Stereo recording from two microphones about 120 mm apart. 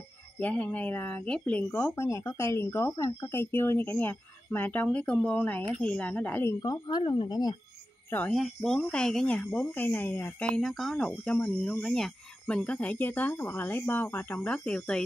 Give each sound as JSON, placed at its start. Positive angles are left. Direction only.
{"t": 0.4, "sound": "speech", "side_deg": 15}
{"t": 6.6, "sound": "speech", "side_deg": 30}
{"t": 7.0, "sound": "speech", "side_deg": 45}
{"t": 8.3, "sound": "speech", "side_deg": 0}
{"t": 10.5, "sound": "speech", "side_deg": 0}